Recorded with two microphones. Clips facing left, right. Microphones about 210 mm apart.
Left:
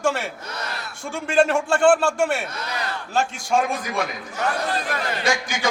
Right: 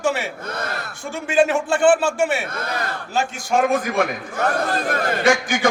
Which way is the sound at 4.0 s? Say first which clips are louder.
Right 5 dB; 55° right (ahead or behind).